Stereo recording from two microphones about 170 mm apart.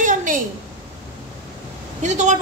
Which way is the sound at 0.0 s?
50° right (ahead or behind).